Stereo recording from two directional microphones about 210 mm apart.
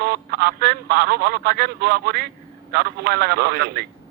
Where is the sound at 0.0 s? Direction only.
50° right (ahead or behind).